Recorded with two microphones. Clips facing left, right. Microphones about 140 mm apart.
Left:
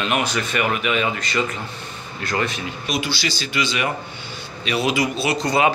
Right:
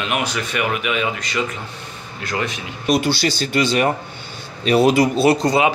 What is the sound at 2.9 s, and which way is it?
Speech, 55° right (ahead or behind).